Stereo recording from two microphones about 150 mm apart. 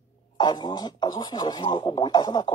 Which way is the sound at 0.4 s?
30° left (ahead or behind).